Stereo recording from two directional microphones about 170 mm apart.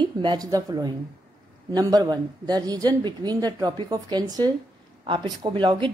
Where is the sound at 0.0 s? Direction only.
25° right (ahead or behind).